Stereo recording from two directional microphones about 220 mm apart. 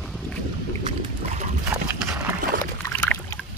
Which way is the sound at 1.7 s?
10° right (ahead or behind).